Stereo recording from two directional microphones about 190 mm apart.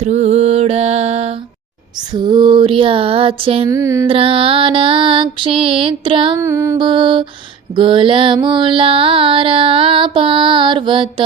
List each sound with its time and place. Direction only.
0.0 s mantra: 35° right (ahead or behind)
2.1 s mantra: 20° right (ahead or behind)
3.7 s a sound: 15° right (ahead or behind)
4.1 s mantra: 30° right (ahead or behind)
6.4 s mantra: 15° right (ahead or behind)